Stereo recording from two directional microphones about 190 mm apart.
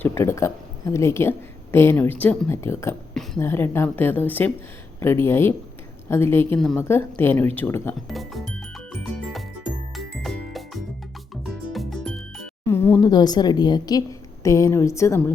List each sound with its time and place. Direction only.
0.0 s a woman's voice: 15° left (ahead or behind)
8.0 s speech: centre (ahead or behind)
8.9 s music: centre (ahead or behind)
12.6 s a sound: 10° left (ahead or behind)
13.0 s a woman's voice: 20° left (ahead or behind)